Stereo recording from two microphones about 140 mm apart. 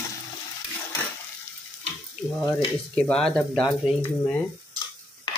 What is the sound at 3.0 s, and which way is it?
Speech, 5° left (ahead or behind).